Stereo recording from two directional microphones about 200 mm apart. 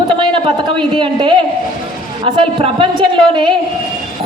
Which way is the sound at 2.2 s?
30° right (ahead or behind).